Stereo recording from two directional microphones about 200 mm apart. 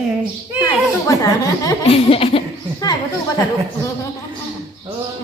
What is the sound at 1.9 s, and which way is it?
Speech, 30° left (ahead or behind).